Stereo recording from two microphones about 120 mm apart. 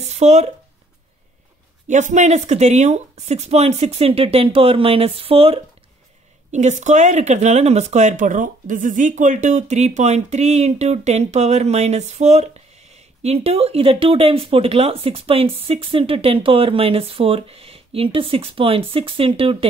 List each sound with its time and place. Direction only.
0.1 s speech: 65° right (ahead or behind)
1.9 s speech: 90° right; by 5.6 s 55° right (ahead or behind)
6.5 s speech: 75° right (ahead or behind); by 19.7 s 50° right (ahead or behind)